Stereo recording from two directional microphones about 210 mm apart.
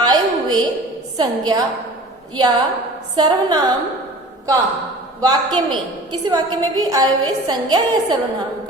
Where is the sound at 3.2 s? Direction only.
20° right (ahead or behind).